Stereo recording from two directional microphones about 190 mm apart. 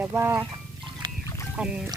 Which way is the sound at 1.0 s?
20° right (ahead or behind).